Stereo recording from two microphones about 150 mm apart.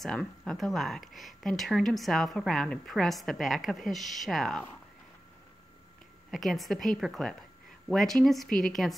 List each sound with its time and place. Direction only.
0.0 s speech: 5° left (ahead or behind)
6.3 s speech: centre (ahead or behind)